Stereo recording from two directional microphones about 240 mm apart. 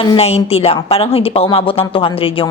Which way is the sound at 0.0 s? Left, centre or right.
Left.